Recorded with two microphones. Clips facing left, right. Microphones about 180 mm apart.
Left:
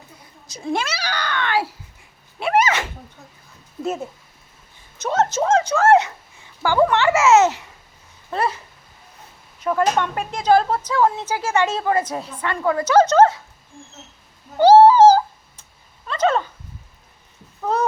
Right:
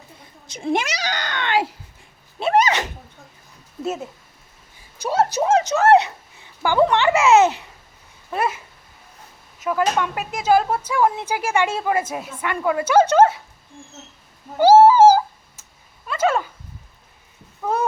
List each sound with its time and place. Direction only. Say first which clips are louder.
0.4 s a sound: right 2 dB; 25° right (ahead or behind)
2.4 s sneeze: right 1 dB; 20° right (ahead or behind)
3.8 s speech: left 1 dB; 5° right (ahead or behind)
5.0 s a sound: even; 10° right (ahead or behind)
6.6 s speech: even; 20° right (ahead or behind)
8.3 s a sound: even; 10° right (ahead or behind)
10.0 s speech: left 1 dB; 5° right (ahead or behind)
14.6 s owl: left 1 dB; 10° right (ahead or behind)
16.0 s dog: left 1 dB; 10° right (ahead or behind)